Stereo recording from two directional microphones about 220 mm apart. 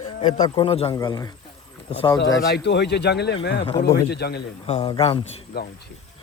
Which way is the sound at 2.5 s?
50° left (ahead or behind).